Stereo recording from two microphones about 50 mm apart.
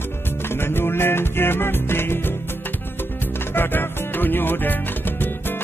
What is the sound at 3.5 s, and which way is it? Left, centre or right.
Music, left.